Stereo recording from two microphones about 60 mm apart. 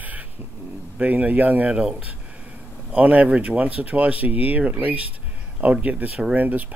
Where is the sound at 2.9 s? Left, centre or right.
Right.